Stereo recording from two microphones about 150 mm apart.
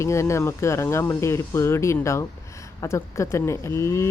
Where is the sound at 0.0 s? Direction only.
20° left (ahead or behind).